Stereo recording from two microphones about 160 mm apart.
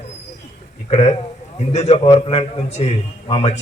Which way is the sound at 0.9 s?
45° left (ahead or behind).